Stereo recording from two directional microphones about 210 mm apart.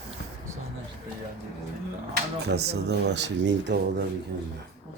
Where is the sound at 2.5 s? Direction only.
50° right (ahead or behind).